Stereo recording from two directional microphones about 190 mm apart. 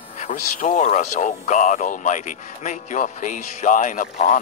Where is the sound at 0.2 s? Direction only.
40° left (ahead or behind).